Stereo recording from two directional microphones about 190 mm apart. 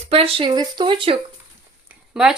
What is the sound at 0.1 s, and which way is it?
Speech, 30° right (ahead or behind).